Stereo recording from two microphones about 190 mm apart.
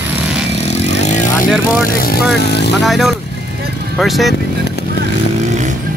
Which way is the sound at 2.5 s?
60° left (ahead or behind).